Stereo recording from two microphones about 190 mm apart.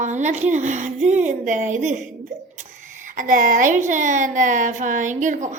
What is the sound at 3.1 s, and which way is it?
A woman's voice, 45° right (ahead or behind).